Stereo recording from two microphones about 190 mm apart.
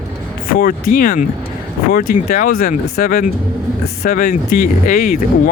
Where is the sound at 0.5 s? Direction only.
45° left (ahead or behind).